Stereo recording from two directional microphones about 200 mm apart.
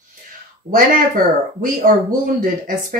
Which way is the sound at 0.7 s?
45° right (ahead or behind).